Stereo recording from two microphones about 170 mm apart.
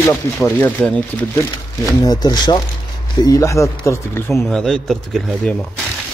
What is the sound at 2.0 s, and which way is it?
Speech, 20° left (ahead or behind).